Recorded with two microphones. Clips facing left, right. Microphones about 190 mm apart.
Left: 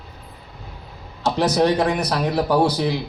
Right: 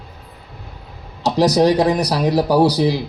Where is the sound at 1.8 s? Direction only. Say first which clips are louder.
Right 4 dB; 35° right (ahead or behind).